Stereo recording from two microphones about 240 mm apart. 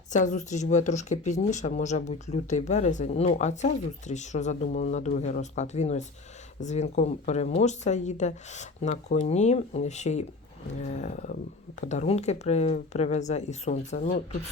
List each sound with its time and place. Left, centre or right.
0.1 s speech: left